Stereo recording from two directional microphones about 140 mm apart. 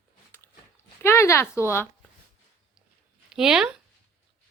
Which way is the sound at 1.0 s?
20° left (ahead or behind).